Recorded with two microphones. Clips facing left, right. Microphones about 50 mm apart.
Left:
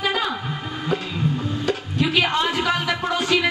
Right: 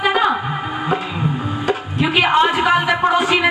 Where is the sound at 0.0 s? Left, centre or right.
Right.